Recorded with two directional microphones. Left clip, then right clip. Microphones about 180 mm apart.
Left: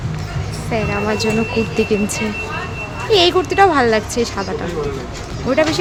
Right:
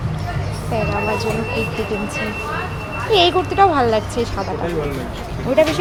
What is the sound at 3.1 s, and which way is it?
Speech, 25° left (ahead or behind).